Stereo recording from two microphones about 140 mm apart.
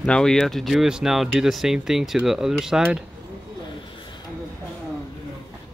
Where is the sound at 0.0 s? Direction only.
5° left (ahead or behind).